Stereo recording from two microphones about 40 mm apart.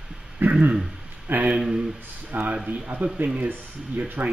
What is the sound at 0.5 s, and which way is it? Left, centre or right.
Speech, right.